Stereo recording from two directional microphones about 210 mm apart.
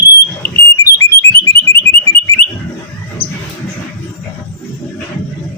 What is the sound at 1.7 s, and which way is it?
Alarm, 10° left (ahead or behind).